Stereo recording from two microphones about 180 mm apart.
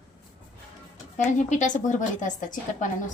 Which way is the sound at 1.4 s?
40° left (ahead or behind).